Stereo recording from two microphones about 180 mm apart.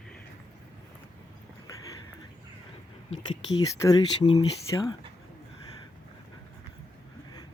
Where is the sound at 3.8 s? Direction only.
20° left (ahead or behind).